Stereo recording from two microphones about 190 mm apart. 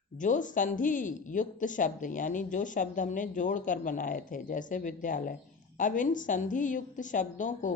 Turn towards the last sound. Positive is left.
turn(degrees=40)  # may be behind; listen again after turning